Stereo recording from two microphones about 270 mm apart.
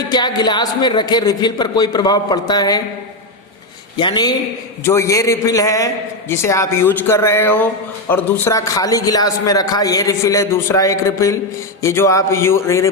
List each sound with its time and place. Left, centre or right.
0.1 s a man's voice: centre
3.9 s a man's voice: centre